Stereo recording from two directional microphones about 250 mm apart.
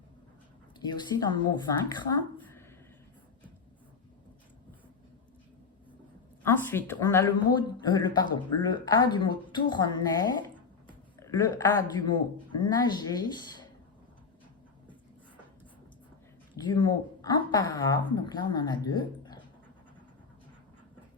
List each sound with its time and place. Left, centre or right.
0.8 s speech: centre
6.4 s a man's voice: centre
16.6 s speech: centre